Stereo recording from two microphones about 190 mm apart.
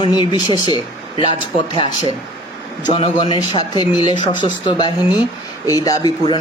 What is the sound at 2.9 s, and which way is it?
A man's voice, 25° left (ahead or behind).